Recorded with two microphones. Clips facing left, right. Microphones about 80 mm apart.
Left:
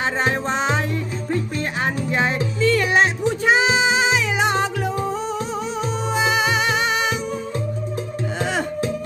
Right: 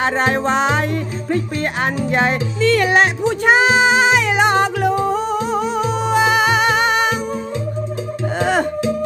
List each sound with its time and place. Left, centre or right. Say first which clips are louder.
0.0 s music: right 4 dB; right
8.4 s music: right 7 dB; right